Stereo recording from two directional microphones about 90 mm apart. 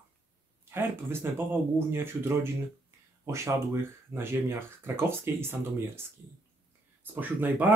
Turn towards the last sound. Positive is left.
turn(degrees=-20)  # may be behind; listen again after turning